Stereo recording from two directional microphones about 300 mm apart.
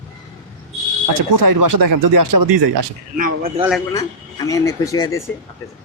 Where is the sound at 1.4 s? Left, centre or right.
Right.